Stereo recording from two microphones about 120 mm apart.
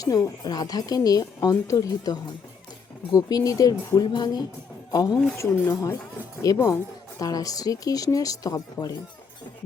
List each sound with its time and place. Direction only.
0.0 s speech: 30° left (ahead or behind)